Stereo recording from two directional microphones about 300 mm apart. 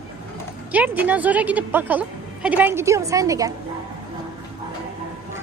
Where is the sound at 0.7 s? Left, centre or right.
Centre.